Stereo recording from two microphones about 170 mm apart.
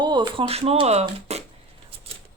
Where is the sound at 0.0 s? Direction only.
25° right (ahead or behind).